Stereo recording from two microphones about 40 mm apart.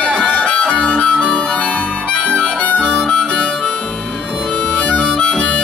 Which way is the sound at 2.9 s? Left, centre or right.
Centre.